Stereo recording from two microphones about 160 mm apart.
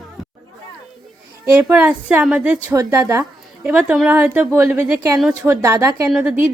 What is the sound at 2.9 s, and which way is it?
Speech, 25° right (ahead or behind).